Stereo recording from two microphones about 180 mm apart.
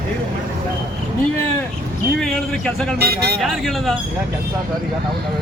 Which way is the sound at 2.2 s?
5° left (ahead or behind).